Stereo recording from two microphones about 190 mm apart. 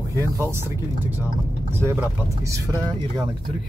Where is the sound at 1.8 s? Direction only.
10° right (ahead or behind).